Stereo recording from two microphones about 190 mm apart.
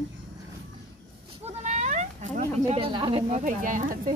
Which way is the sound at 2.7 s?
25° right (ahead or behind).